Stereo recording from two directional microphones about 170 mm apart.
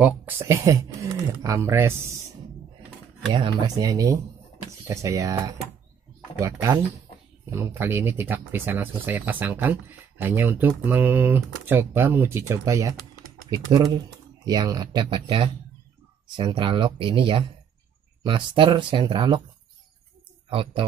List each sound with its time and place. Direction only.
0.0 s speech: 15° right (ahead or behind)
3.3 s speech: 30° right (ahead or behind)
20.4 s speech: 30° right (ahead or behind)